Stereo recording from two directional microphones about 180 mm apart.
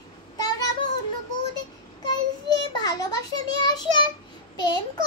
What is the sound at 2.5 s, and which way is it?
Child singing, 25° left (ahead or behind).